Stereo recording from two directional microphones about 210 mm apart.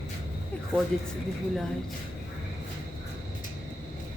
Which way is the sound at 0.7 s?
10° left (ahead or behind).